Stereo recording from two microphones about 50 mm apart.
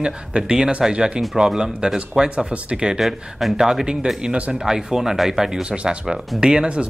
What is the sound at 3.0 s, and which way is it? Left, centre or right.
Speech, centre.